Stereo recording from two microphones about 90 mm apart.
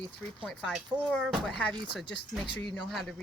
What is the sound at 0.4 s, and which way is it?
Speech, 5° left (ahead or behind).